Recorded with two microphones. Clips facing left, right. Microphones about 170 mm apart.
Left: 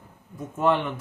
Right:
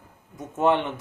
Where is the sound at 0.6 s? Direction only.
25° right (ahead or behind).